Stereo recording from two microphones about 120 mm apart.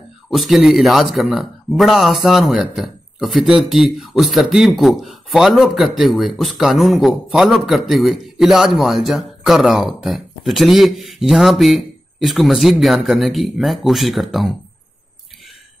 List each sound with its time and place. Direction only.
0.3 s speech: centre (ahead or behind)